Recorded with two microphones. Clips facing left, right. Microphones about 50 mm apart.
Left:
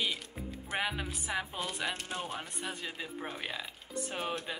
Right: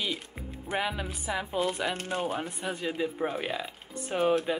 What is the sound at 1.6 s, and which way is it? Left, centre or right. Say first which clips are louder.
Speech: right 8 dB; right.